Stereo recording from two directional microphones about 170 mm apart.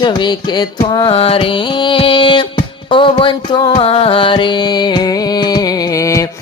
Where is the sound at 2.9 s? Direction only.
30° left (ahead or behind).